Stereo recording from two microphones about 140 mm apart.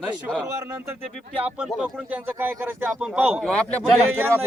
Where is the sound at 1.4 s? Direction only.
10° right (ahead or behind).